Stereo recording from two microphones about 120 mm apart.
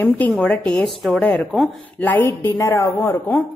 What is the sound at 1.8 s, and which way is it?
Speech, 15° left (ahead or behind).